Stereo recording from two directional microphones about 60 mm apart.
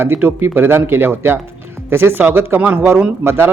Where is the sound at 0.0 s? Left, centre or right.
Right.